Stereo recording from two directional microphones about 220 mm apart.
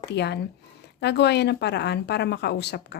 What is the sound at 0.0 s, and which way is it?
Speech, 50° left (ahead or behind).